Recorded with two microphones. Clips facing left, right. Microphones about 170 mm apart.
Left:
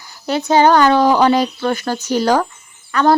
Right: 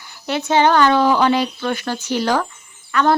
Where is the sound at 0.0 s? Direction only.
40° left (ahead or behind).